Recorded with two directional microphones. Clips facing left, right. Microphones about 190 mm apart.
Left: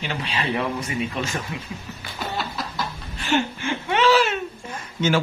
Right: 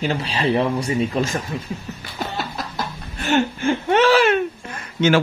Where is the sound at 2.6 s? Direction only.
45° right (ahead or behind).